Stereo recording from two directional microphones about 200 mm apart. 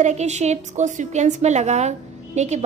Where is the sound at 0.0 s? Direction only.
35° right (ahead or behind).